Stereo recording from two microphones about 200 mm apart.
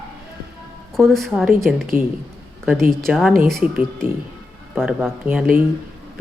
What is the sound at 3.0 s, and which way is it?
Speech, centre (ahead or behind).